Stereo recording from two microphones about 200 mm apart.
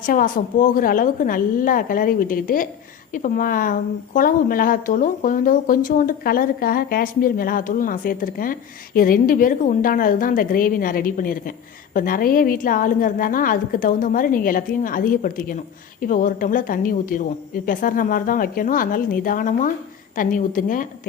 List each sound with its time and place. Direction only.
0.0 s a woman's voice: 45° left (ahead or behind)